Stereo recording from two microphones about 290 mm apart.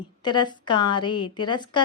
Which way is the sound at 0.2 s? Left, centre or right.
Centre.